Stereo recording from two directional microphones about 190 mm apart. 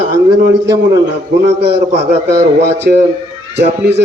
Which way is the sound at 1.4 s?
60° right (ahead or behind).